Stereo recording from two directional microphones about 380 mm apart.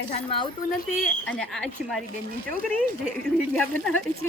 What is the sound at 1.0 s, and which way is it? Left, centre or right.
Speech, centre.